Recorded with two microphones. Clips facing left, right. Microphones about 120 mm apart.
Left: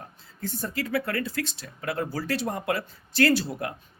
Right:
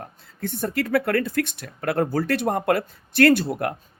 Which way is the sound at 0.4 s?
60° right (ahead or behind).